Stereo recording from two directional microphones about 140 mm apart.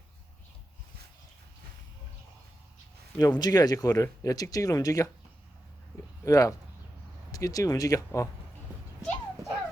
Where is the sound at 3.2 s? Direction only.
25° left (ahead or behind).